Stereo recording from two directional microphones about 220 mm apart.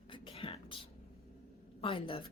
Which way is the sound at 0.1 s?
25° left (ahead or behind).